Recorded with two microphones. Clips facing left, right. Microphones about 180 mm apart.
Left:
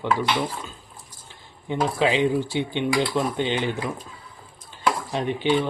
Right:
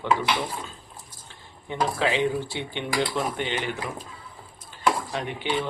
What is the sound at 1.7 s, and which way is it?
Speech, 15° left (ahead or behind).